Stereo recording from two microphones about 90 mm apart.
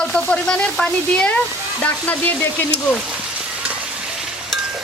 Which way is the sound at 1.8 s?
20° left (ahead or behind).